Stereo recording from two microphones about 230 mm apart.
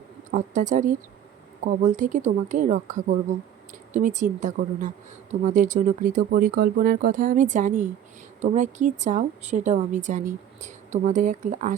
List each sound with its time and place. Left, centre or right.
0.3 s a woman's voice: right